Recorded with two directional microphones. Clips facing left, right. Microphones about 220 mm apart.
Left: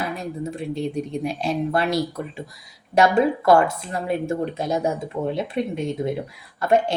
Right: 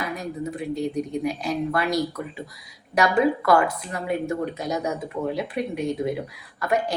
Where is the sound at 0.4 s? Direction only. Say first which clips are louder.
Even; 25° left (ahead or behind).